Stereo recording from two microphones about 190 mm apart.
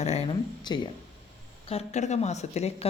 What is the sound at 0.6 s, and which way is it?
Speech, 20° left (ahead or behind).